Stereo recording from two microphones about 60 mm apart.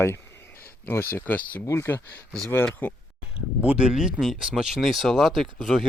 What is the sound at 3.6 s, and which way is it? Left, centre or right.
Speech, right.